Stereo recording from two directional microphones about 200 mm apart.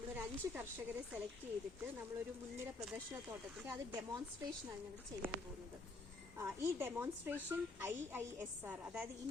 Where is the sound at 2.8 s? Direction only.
5° right (ahead or behind).